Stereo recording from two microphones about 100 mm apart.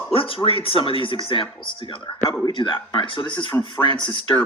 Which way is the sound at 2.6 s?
50° left (ahead or behind).